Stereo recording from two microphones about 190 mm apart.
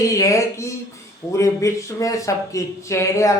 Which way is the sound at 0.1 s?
15° left (ahead or behind).